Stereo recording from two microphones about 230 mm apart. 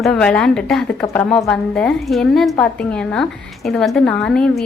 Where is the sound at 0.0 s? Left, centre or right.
Centre.